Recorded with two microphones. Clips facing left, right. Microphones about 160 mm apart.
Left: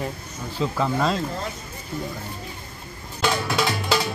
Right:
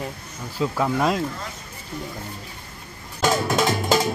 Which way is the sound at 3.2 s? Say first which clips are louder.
Right 3 dB; 45° right (ahead or behind).